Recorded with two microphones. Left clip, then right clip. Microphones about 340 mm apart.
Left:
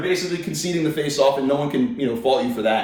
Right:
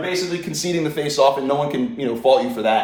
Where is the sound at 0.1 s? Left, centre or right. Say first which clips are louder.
Even; centre.